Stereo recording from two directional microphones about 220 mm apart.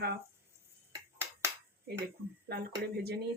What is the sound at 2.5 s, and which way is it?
Speech, 45° right (ahead or behind).